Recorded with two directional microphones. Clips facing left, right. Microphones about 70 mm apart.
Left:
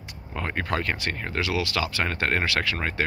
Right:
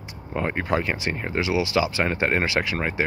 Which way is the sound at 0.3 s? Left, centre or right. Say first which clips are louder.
Right 4 dB; centre.